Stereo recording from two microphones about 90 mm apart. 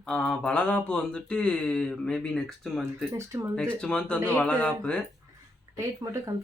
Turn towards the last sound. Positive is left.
turn(degrees=-40)  # may be behind; listen again after turning